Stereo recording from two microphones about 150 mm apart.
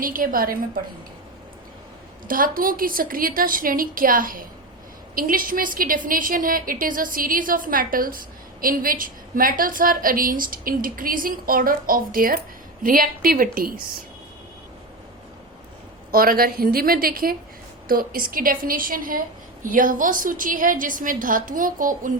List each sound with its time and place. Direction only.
0.0 s a woman's voice: 65° right (ahead or behind)
2.2 s a woman's voice: 70° right (ahead or behind)
16.1 s a woman's voice: 75° right (ahead or behind)